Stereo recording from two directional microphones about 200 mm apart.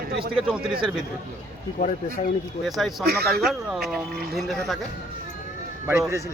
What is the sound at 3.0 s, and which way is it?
Speech, 50° right (ahead or behind).